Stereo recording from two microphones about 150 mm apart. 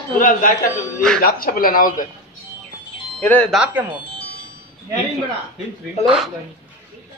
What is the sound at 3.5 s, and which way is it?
Speech, 5° right (ahead or behind).